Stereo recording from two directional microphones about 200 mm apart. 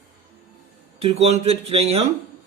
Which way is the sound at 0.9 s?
30° right (ahead or behind).